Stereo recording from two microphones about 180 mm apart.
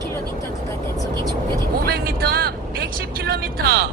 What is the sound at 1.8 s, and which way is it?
Speech, 55° right (ahead or behind).